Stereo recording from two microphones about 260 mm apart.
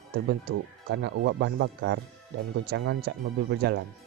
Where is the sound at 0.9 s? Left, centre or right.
Right.